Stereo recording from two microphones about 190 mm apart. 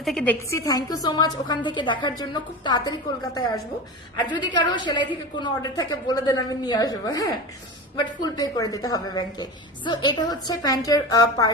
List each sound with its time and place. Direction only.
0.0 s a woman's voice: 5° left (ahead or behind)